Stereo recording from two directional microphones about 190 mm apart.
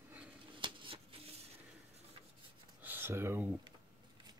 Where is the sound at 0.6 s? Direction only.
25° right (ahead or behind).